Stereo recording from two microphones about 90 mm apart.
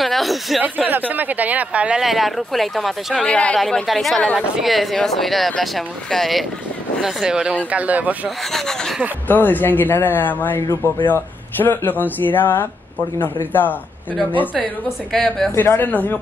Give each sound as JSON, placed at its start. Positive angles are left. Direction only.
{"t": 0.0, "sound": "speech", "side_deg": 0}
{"t": 0.6, "sound": "speech", "side_deg": -20}
{"t": 3.3, "sound": "speech", "side_deg": 10}
{"t": 8.5, "sound": "speech", "side_deg": 5}
{"t": 9.3, "sound": "a man's voice", "side_deg": 20}
{"t": 15.1, "sound": "speech", "side_deg": 5}
{"t": 15.5, "sound": "a man's voice", "side_deg": 25}